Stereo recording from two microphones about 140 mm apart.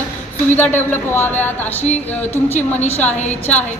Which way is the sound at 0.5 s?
15° left (ahead or behind).